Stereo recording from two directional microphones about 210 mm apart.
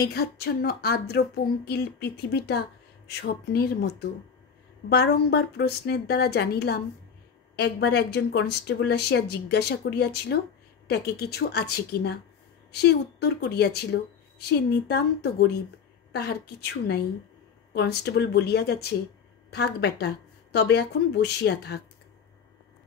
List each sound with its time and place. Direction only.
0.0 s speech: 50° left (ahead or behind)